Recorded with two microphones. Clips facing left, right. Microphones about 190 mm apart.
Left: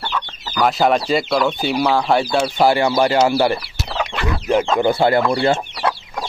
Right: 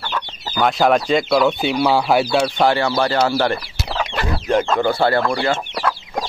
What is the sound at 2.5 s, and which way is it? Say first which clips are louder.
Speech: left 2 dB; 10° left (ahead or behind).